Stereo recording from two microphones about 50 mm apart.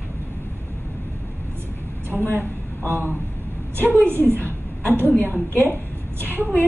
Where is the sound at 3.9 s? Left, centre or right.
Right.